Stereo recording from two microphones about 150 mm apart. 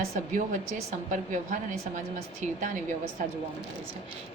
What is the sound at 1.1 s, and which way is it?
Speech, 60° right (ahead or behind).